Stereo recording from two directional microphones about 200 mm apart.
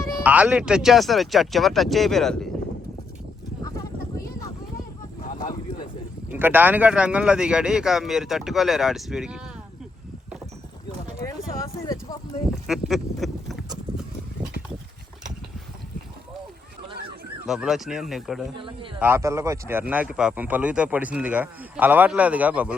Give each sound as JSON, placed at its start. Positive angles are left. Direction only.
{"t": 0.2, "sound": "speech", "side_deg": -5}
{"t": 6.3, "sound": "speech", "side_deg": -10}
{"t": 11.2, "sound": "a sound", "side_deg": 15}
{"t": 12.6, "sound": "duck", "side_deg": 0}
{"t": 17.4, "sound": "speech", "side_deg": 0}